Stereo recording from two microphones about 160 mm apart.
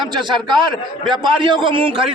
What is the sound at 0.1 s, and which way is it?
A man's voice, 30° right (ahead or behind).